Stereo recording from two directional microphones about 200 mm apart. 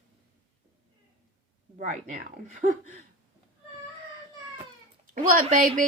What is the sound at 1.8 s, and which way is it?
Speech, 40° right (ahead or behind).